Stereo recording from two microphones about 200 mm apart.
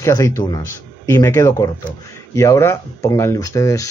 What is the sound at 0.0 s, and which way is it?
Speech, 15° left (ahead or behind).